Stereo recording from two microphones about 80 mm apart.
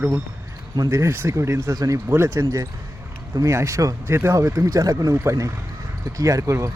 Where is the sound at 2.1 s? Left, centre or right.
Right.